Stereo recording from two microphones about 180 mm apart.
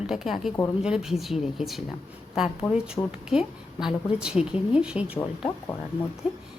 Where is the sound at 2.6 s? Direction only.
15° left (ahead or behind).